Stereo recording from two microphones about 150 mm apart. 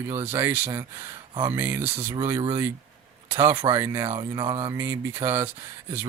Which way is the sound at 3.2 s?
15° right (ahead or behind).